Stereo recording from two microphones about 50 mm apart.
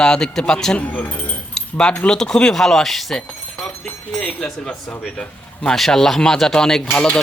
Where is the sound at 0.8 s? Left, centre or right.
Left.